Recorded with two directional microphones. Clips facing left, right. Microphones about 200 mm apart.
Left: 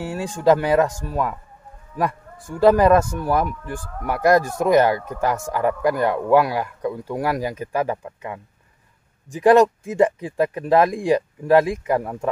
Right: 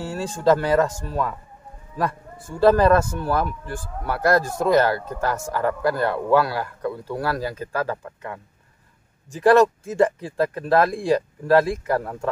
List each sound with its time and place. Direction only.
0.0 s speech: 15° left (ahead or behind)